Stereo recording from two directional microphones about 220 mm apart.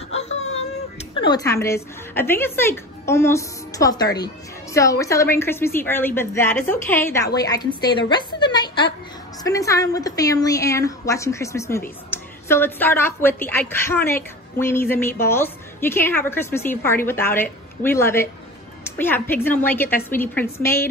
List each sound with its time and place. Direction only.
1.1 s a woman's voice: 20° left (ahead or behind)
8.1 s music: 20° left (ahead or behind)
9.4 s a woman's voice: 15° left (ahead or behind)